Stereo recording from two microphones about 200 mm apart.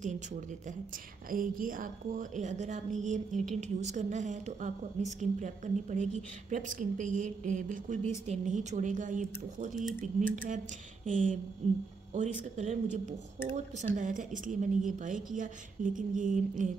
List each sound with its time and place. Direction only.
0.0 s a woman's voice: 40° right (ahead or behind)